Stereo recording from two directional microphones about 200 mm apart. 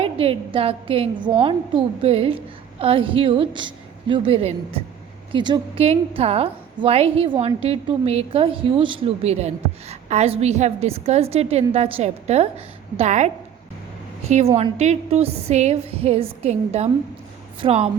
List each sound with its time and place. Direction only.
0.0 s a woman's voice: 30° right (ahead or behind)